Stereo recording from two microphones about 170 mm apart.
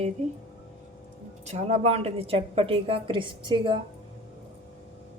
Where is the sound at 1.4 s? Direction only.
40° right (ahead or behind).